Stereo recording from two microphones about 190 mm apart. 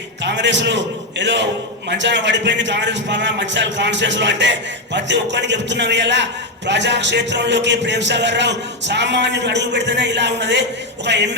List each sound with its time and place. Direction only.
0.2 s speech: 70° right (ahead or behind)